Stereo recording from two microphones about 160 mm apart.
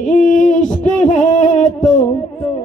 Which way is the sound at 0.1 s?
50° left (ahead or behind).